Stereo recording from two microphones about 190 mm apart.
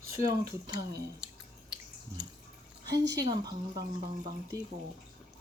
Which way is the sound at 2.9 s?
60° right (ahead or behind).